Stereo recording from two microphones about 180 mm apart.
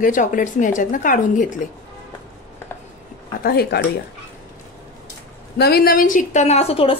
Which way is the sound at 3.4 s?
60° left (ahead or behind).